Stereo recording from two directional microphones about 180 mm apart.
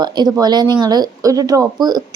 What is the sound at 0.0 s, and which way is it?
Speech, 20° right (ahead or behind).